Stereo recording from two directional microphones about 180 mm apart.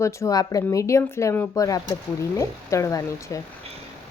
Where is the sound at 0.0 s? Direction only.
20° left (ahead or behind).